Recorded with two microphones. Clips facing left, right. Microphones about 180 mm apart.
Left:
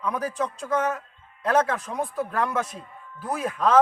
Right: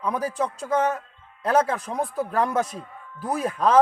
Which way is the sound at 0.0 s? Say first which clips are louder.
Right 2 dB; 30° right (ahead or behind).